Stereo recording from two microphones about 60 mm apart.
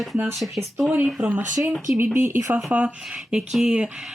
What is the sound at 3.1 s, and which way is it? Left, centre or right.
Speech, centre.